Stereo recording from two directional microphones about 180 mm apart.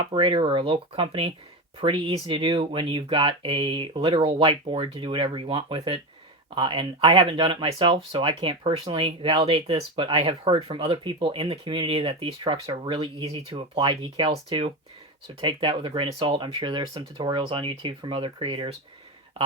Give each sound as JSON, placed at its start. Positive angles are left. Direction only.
{"t": 0.1, "sound": "speech", "side_deg": -30}